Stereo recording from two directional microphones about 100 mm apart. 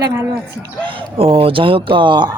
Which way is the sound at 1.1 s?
70° right (ahead or behind).